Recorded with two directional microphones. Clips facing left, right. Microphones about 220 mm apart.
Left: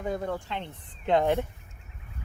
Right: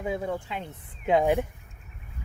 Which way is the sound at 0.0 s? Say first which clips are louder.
Right 1 dB; 5° right (ahead or behind).